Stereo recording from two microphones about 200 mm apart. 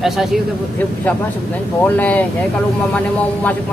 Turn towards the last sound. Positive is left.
turn(degrees=10)  # may be behind; listen again after turning